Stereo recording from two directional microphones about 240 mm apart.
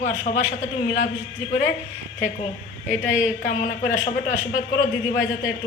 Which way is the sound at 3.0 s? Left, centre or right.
Left.